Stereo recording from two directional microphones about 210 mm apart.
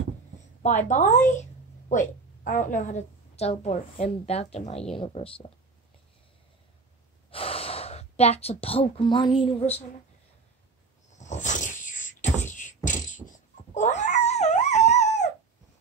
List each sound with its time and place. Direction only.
0.8 s a woman's voice: 35° left (ahead or behind)
7.2 s speech: 25° left (ahead or behind)
11.1 s a sound: 35° left (ahead or behind)
12.5 s cat: 35° left (ahead or behind)